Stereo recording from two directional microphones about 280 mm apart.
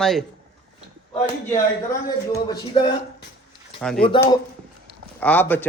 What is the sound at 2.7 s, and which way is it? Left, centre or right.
Speech, left.